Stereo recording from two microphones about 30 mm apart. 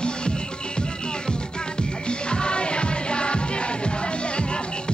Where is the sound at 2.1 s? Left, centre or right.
Left.